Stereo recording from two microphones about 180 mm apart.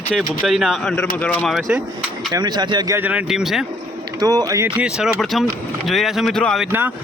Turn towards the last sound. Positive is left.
turn(degrees=5)  # may be behind; listen again after turning